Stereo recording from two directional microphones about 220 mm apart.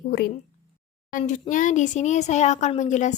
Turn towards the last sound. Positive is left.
turn(degrees=35)  # may be behind; listen again after turning